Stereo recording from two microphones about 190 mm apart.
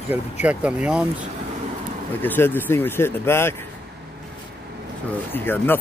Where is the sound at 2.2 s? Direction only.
10° left (ahead or behind).